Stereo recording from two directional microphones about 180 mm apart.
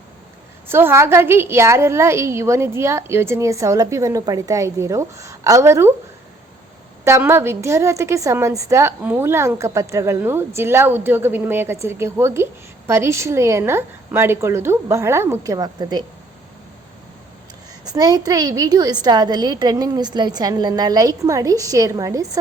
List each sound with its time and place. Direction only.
0.7 s a woman's voice: 15° right (ahead or behind)
7.0 s a woman's voice: 15° right (ahead or behind)
17.8 s a woman's voice: 20° right (ahead or behind)